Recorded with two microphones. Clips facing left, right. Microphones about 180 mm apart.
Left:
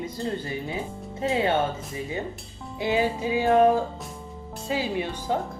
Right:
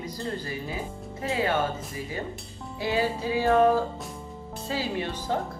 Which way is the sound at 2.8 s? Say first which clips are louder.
Left 2 dB; 20° left (ahead or behind).